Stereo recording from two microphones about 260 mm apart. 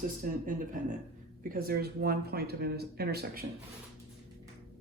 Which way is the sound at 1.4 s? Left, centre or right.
Right.